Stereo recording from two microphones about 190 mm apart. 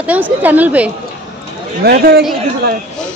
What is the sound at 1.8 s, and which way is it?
Speech, 55° right (ahead or behind).